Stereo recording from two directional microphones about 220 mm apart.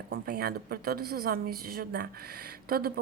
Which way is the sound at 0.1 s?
45° right (ahead or behind).